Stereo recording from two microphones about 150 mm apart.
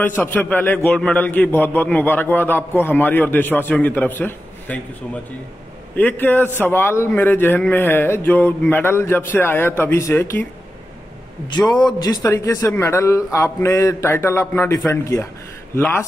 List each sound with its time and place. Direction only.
0.0 s a man's voice: 10° left (ahead or behind)
12.0 s a man's voice: 25° left (ahead or behind)